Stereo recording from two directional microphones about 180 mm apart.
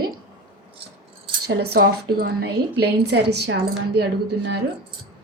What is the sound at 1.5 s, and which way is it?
A woman's voice, 60° right (ahead or behind).